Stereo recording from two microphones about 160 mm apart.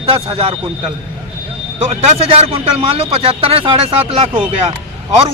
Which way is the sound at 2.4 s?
35° right (ahead or behind).